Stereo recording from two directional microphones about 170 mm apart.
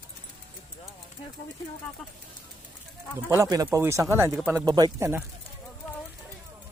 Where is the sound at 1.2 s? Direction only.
35° left (ahead or behind).